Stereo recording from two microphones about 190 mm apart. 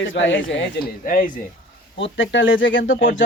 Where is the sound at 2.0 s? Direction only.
75° left (ahead or behind).